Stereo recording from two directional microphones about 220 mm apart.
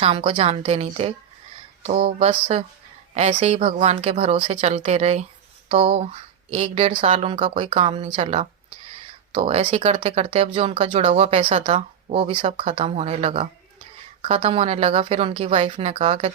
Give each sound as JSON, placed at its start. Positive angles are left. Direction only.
{"t": 0.0, "sound": "speech", "side_deg": -25}
{"t": 3.2, "sound": "speech", "side_deg": -30}